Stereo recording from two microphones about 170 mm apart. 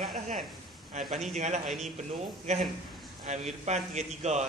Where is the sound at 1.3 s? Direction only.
40° right (ahead or behind).